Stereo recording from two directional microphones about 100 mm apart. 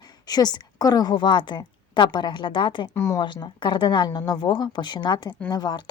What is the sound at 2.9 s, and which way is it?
Speech, 30° left (ahead or behind).